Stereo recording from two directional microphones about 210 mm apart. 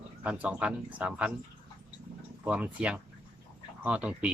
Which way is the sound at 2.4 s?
5° right (ahead or behind).